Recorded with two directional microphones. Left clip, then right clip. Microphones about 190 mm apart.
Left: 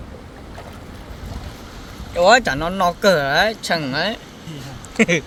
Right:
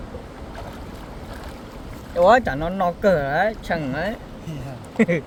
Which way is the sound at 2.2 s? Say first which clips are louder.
Left 2 dB; 15° left (ahead or behind).